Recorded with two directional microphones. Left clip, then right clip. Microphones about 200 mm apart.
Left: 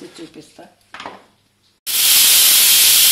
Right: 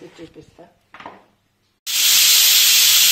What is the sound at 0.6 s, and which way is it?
Speech, 90° left.